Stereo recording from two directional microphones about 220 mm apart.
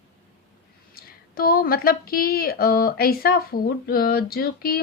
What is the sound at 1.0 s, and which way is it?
Speech, 45° left (ahead or behind).